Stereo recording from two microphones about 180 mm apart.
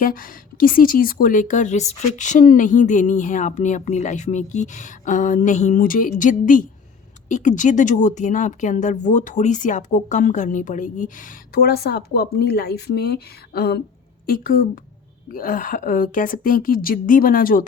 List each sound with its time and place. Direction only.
0.0 s a woman's voice: 50° left (ahead or behind)